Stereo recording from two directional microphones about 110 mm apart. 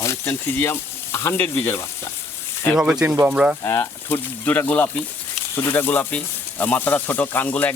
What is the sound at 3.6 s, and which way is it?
Speech, 25° left (ahead or behind).